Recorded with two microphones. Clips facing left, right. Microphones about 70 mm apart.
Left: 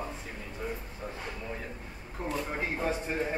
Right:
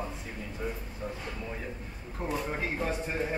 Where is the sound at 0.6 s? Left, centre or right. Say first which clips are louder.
Even; centre.